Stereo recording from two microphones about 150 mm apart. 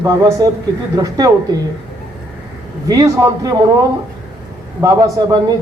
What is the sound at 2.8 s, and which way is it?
Speech, 25° right (ahead or behind).